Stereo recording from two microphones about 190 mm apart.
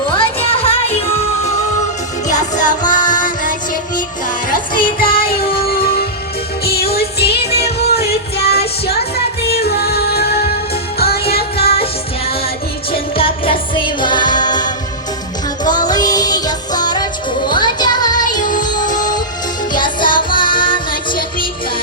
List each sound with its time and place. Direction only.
0.1 s music: 30° left (ahead or behind)
2.3 s music: 40° left (ahead or behind)
6.7 s music: 55° left (ahead or behind)
11.5 s music: 30° left (ahead or behind)
13.4 s music: 25° left (ahead or behind)
18.3 s music: 45° left (ahead or behind)
18.6 s music: 20° left (ahead or behind)
21.1 s music: 45° left (ahead or behind)